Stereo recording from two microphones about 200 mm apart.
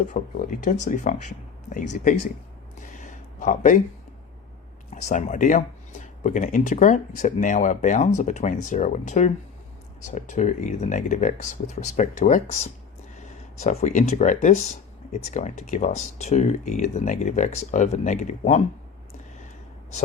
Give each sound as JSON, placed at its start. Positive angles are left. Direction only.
{"t": 0.1, "sound": "speech", "side_deg": 45}
{"t": 2.8, "sound": "a sound", "side_deg": 40}
{"t": 4.9, "sound": "speech", "side_deg": 35}